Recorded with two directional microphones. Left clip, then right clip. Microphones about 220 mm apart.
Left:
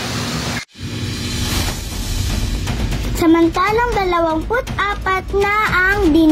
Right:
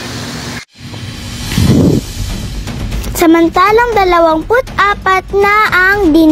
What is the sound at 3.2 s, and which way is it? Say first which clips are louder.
Speech: right 6 dB; 50° right (ahead or behind).